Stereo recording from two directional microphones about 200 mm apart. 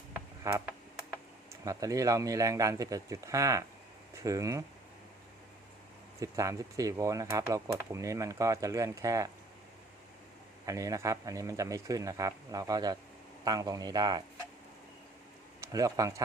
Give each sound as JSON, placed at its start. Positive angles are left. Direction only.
{"t": 0.1, "sound": "a sound", "side_deg": -15}
{"t": 1.6, "sound": "speech", "side_deg": -15}
{"t": 6.1, "sound": "speech", "side_deg": -15}
{"t": 10.7, "sound": "speech", "side_deg": -15}
{"t": 15.6, "sound": "speech", "side_deg": -15}